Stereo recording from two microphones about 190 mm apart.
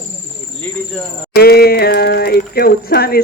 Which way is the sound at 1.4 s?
55° left (ahead or behind).